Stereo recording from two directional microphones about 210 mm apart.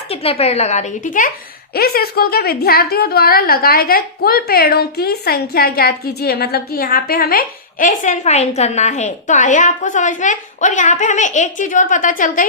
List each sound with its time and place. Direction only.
0.1 s a woman's voice: 30° left (ahead or behind)